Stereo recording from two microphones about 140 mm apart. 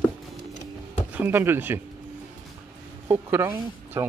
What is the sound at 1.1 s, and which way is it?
Speech, 15° right (ahead or behind).